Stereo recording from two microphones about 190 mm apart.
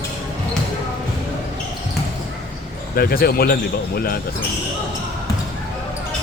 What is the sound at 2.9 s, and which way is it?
Speech, 50° left (ahead or behind).